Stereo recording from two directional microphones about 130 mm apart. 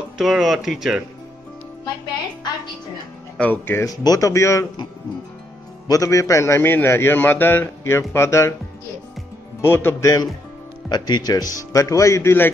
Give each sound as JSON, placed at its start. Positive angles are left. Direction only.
{"t": 0.2, "sound": "speech", "side_deg": 0}
{"t": 3.3, "sound": "a man's voice", "side_deg": 15}
{"t": 5.9, "sound": "a man's voice", "side_deg": 25}
{"t": 9.6, "sound": "a man's voice", "side_deg": 20}